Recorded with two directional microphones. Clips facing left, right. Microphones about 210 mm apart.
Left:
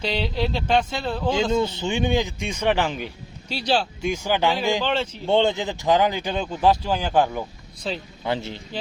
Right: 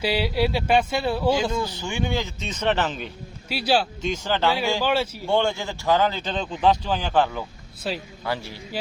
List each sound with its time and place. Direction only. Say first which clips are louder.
0.0 s speech: right 2 dB; 5° right (ahead or behind)
1.5 s speech: left 4 dB; 25° left (ahead or behind)
3.5 s speech: right 1 dB; 5° right (ahead or behind)
4.0 s speech: left 1 dB; 10° left (ahead or behind)
4.8 s speech: right 1 dB; 10° right (ahead or behind)
5.2 s speech: left 3 dB; 20° left (ahead or behind)
7.9 s speech: even; 5° right (ahead or behind)
8.2 s a man's voice: left 6 dB; 20° left (ahead or behind)